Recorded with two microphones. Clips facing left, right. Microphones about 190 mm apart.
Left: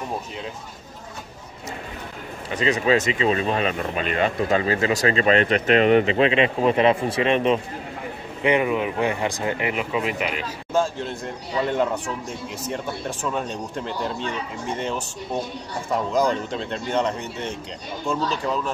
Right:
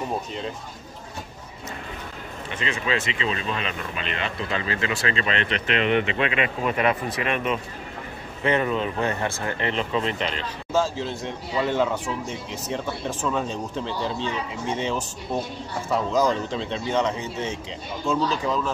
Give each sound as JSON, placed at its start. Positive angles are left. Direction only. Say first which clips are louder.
{"t": 2.5, "sound": "speech", "louder": "left 7 dB", "side_deg": 35}
{"t": 8.4, "sound": "speech", "louder": "left 2 dB", "side_deg": 15}
{"t": 10.7, "sound": "speech", "louder": "left 1 dB", "side_deg": 0}
{"t": 15.9, "sound": "speech", "louder": "even", "side_deg": 10}
{"t": 16.5, "sound": "speech", "louder": "even", "side_deg": 0}